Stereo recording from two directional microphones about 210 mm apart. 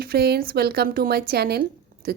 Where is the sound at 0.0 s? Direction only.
50° right (ahead or behind).